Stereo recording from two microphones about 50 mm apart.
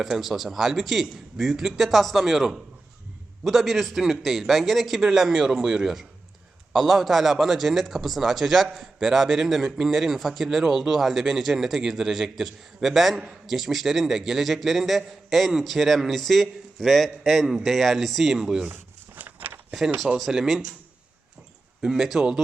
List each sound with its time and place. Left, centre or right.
0.0 s a man's voice: centre
18.7 s a sound: right
20.1 s a man's voice: centre
21.8 s speech: centre